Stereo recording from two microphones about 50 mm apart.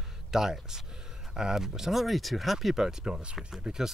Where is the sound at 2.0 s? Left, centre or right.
Centre.